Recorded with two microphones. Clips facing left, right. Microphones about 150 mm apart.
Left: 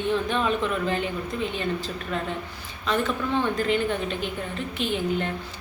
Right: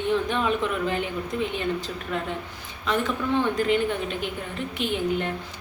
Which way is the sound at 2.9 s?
15° right (ahead or behind).